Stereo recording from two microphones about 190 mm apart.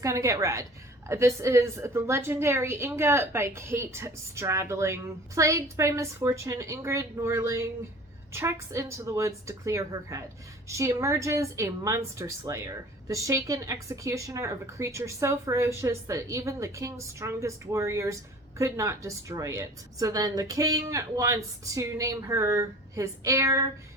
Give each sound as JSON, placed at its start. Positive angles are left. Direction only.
{"t": 0.0, "sound": "a woman's voice", "side_deg": -15}